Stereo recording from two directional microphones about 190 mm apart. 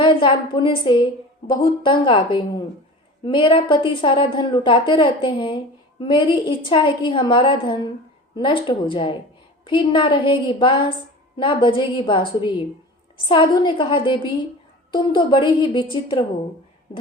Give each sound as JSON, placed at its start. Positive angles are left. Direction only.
{"t": 0.0, "sound": "a woman's voice", "side_deg": 25}